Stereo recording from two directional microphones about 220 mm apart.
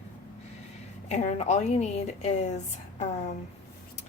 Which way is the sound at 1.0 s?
30° left (ahead or behind).